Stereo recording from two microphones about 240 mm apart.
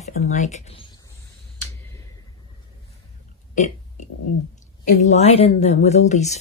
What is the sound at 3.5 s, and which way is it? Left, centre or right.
Burping, left.